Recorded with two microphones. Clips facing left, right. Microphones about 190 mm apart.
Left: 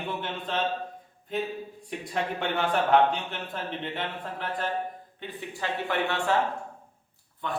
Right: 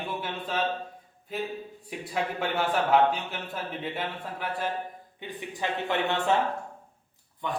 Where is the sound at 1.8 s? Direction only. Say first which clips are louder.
Even; 5° right (ahead or behind); by 6.4 s 20° right (ahead or behind).